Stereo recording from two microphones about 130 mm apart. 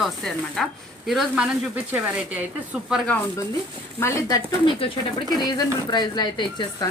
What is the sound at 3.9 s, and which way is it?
Speech, 20° left (ahead or behind).